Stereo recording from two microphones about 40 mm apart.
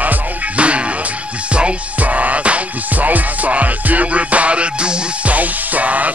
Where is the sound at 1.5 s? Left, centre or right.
Right.